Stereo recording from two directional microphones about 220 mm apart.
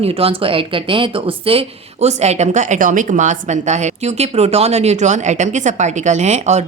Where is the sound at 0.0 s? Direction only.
25° right (ahead or behind).